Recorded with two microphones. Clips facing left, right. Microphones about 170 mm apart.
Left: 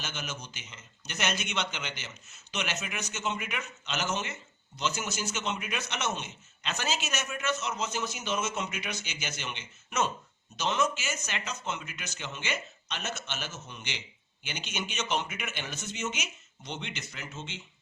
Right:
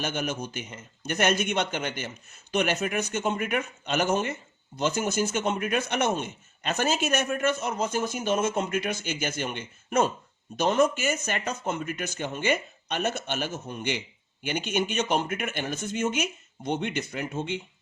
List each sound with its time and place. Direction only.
0.0 s a man's voice: 55° right (ahead or behind)